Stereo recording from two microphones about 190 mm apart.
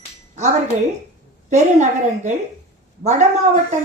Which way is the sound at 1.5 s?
40° right (ahead or behind).